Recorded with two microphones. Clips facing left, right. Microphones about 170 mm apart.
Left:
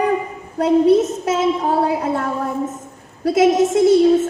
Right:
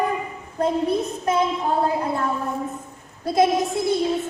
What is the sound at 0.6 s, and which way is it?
A woman's voice, 90° left.